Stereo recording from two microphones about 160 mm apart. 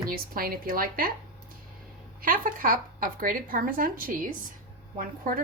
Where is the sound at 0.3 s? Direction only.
65° right (ahead or behind).